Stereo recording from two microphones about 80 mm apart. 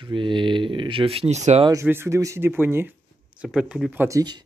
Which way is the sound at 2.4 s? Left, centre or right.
Right.